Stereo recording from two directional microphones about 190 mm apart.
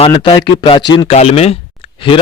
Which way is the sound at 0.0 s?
25° left (ahead or behind).